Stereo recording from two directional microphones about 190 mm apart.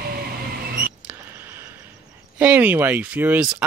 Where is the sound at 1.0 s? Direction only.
10° right (ahead or behind).